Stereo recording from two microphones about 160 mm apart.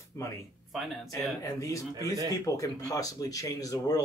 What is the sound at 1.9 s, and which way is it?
Speech, 20° right (ahead or behind).